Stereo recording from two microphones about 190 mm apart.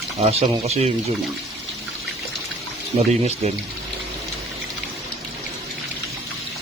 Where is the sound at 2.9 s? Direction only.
30° right (ahead or behind).